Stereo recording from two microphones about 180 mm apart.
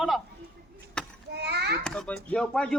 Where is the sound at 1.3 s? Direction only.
65° right (ahead or behind).